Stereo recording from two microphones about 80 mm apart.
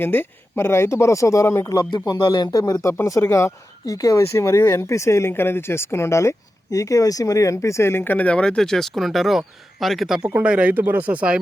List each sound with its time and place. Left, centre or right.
0.0 s speech: left
2.1 s speech: left
2.5 s speech: left; by 10.2 s centre
10.2 s speech: centre